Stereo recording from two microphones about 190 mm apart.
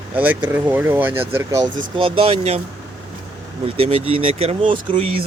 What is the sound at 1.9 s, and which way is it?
Speech, 25° right (ahead or behind).